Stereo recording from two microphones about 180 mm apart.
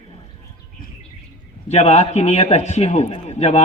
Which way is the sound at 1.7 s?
35° left (ahead or behind).